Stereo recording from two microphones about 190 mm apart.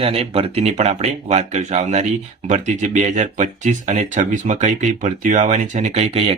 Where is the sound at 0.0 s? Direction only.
30° right (ahead or behind).